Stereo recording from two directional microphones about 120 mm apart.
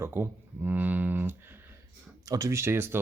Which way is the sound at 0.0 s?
20° right (ahead or behind).